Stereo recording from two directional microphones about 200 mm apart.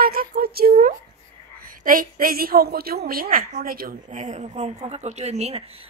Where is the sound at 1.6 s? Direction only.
45° right (ahead or behind).